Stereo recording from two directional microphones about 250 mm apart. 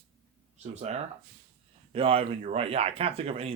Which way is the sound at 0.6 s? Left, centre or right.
Right.